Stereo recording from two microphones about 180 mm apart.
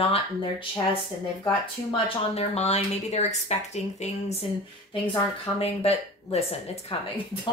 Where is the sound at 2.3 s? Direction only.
35° left (ahead or behind).